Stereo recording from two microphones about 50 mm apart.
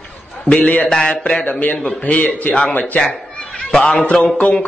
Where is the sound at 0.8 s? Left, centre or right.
Centre.